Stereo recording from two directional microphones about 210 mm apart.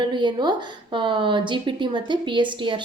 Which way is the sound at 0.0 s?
20° right (ahead or behind).